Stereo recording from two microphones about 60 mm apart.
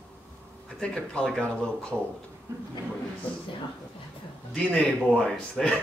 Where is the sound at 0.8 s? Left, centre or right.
Centre.